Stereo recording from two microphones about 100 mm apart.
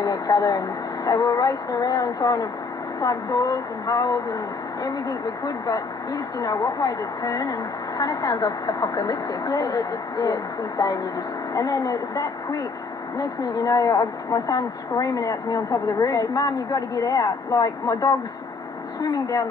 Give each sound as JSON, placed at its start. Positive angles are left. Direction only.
{"t": 0.0, "sound": "a woman's voice", "side_deg": 40}